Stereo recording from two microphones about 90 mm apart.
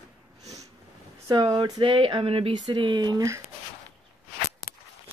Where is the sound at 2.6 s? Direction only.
60° right (ahead or behind).